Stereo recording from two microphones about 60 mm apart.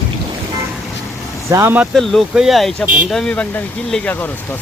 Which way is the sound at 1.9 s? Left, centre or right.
Centre.